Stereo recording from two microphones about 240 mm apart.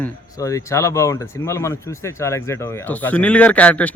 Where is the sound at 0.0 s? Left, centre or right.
Centre.